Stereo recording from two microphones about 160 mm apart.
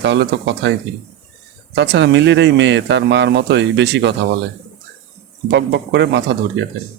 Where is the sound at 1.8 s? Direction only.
90° right.